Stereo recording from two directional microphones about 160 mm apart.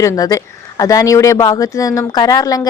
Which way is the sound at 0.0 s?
20° left (ahead or behind).